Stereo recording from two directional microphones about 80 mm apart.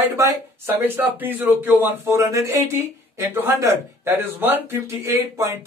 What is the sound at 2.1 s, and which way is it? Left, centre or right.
A man's voice, right.